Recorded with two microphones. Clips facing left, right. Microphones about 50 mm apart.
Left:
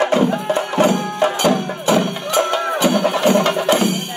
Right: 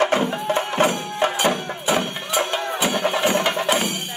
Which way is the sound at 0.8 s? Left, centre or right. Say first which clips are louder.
Left 4 dB; right.